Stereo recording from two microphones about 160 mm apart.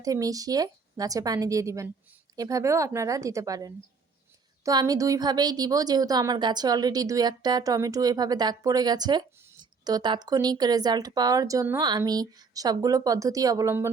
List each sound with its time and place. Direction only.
0.0 s a woman's voice: 20° right (ahead or behind)